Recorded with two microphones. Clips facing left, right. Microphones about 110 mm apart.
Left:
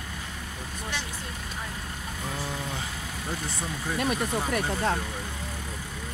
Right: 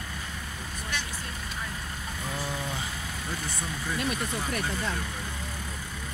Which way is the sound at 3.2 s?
35° left (ahead or behind).